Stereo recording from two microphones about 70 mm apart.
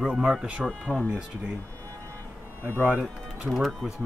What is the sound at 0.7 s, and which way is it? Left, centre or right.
Speech, centre.